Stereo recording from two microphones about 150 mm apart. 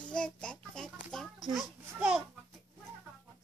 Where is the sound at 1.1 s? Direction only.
Centre (ahead or behind).